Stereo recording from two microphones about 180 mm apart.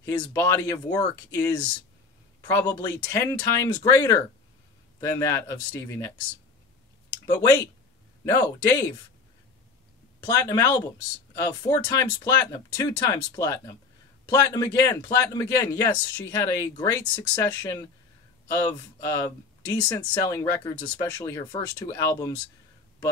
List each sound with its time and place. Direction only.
0.0 s speech: 15° left (ahead or behind)
7.2 s speech: 20° left (ahead or behind)
10.2 s speech: 20° left (ahead or behind)